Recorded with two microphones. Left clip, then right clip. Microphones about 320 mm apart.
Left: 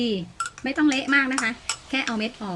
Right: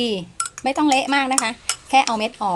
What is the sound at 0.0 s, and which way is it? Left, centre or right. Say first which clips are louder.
Speech: right 3 dB; centre.